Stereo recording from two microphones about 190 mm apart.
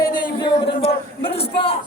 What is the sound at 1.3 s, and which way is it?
Speech, 30° left (ahead or behind).